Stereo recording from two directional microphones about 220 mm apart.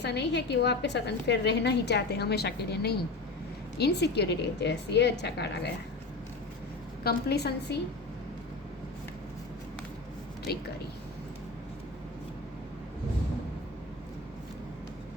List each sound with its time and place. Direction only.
0.0 s a woman's voice: 50° left (ahead or behind)
7.0 s a woman's voice: 45° left (ahead or behind)
10.5 s a woman's voice: 45° left (ahead or behind)